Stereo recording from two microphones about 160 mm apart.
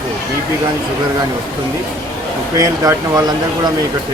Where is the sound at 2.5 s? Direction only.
20° right (ahead or behind).